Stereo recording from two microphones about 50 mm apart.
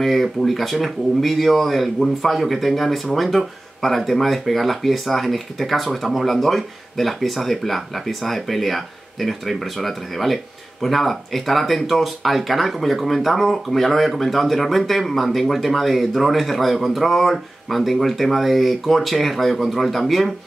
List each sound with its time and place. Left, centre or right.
0.0 s speech: centre